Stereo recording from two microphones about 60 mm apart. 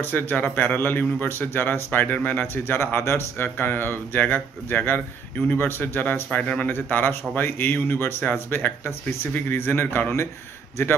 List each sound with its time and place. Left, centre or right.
0.0 s speech: left
3.4 s speech: left
6.4 s a man's voice: centre
6.7 s speech: left